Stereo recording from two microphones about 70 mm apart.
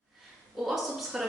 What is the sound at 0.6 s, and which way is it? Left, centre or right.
Speech, centre.